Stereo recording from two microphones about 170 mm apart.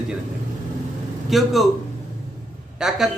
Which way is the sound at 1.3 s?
Centre (ahead or behind).